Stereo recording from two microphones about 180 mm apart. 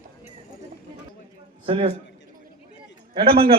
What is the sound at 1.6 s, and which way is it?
Speech, 30° right (ahead or behind).